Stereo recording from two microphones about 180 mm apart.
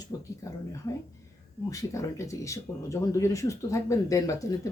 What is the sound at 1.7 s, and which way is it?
Speech, 20° left (ahead or behind).